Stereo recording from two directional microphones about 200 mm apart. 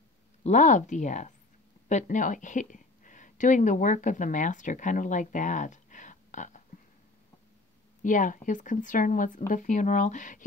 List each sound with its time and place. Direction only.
0.4 s speech: 40° left (ahead or behind)
8.0 s speech: 40° left (ahead or behind)